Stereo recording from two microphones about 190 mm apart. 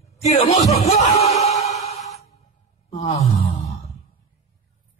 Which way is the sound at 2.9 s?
35° left (ahead or behind).